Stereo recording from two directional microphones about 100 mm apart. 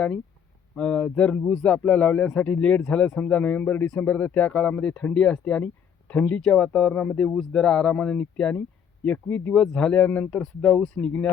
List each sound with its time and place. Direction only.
0.8 s speech: 10° left (ahead or behind)